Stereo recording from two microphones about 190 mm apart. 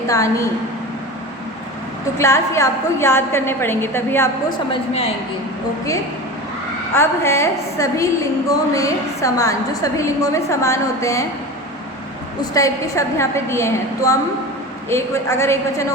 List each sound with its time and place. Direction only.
0.1 s a woman's voice: 15° left (ahead or behind)
2.1 s a woman's voice: 15° left (ahead or behind)
4.7 s a woman's voice: 30° left (ahead or behind)
6.9 s a woman's voice: 15° left (ahead or behind)
12.4 s a woman's voice: 15° left (ahead or behind)